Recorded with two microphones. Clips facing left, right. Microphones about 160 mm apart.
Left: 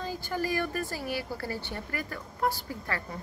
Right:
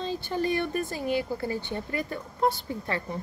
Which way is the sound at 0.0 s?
25° right (ahead or behind).